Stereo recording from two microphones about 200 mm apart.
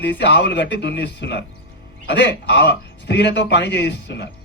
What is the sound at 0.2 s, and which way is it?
A man's voice, 60° left (ahead or behind).